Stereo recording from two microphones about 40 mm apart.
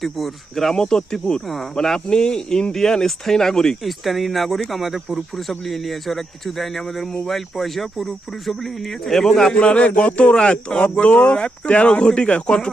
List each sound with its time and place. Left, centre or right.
0.0 s speech: centre
0.7 s speech: centre
3.8 s speech: centre
9.6 s speech: left